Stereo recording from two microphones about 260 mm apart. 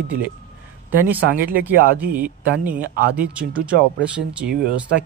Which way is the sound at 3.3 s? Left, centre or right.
Centre.